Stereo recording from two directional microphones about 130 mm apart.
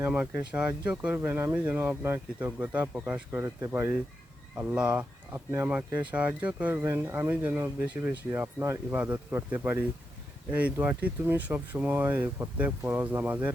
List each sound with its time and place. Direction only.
0.0 s speech: 10° right (ahead or behind)
4.5 s speech: 10° right (ahead or behind)